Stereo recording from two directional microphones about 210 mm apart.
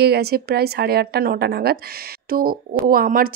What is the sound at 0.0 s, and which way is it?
A woman's voice, 50° right (ahead or behind).